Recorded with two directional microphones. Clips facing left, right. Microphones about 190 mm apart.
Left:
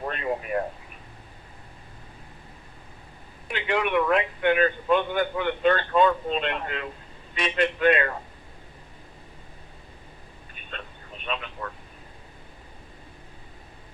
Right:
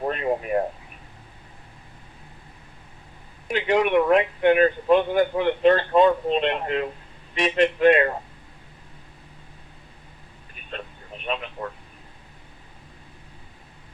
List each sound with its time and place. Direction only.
0.0 s speech: 25° right (ahead or behind)
3.5 s a man's voice: 40° right (ahead or behind)
11.6 s a man's voice: 35° right (ahead or behind)